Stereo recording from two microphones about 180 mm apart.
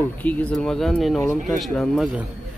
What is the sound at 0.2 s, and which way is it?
Speech, 10° left (ahead or behind).